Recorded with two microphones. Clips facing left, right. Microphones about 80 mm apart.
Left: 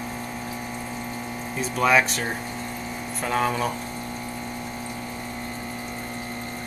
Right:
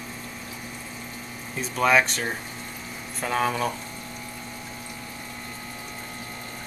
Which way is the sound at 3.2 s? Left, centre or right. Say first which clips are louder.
Left 1 dB; centre.